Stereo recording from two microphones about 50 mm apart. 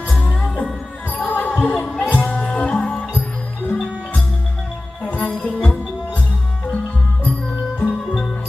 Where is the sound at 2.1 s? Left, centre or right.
Left.